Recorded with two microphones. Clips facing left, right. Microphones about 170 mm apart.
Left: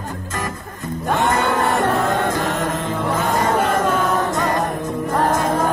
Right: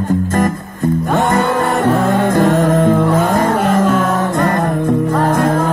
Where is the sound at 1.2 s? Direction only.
50° right (ahead or behind).